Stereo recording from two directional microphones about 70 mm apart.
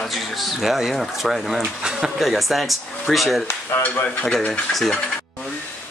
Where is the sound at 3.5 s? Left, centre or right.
Left.